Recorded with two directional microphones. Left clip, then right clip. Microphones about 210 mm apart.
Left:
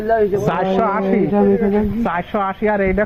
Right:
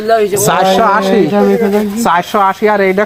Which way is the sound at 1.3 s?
40° right (ahead or behind).